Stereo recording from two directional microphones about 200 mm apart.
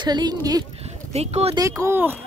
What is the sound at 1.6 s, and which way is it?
Speech, 15° right (ahead or behind).